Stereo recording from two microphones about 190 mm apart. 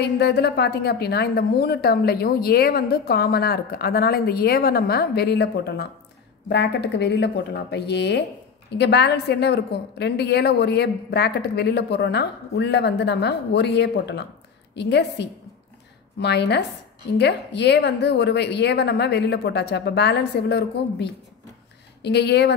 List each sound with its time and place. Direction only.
0.0 s a woman's voice: 60° left (ahead or behind)